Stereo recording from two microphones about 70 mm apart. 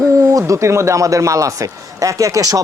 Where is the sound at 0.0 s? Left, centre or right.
Right.